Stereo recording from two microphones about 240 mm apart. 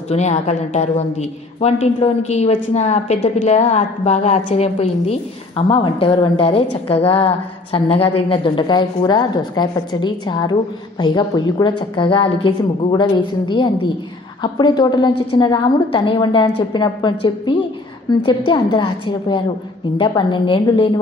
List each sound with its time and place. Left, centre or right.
0.1 s a woman's voice: left
14.4 s a woman's voice: centre